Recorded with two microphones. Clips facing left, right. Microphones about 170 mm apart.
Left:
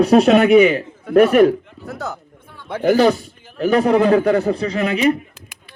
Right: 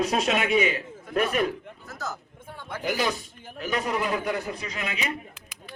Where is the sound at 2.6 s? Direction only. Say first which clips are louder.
Left 13 dB; 65° left (ahead or behind).